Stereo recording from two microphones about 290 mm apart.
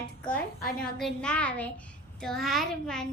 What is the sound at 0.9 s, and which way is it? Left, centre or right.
A child's voice, centre.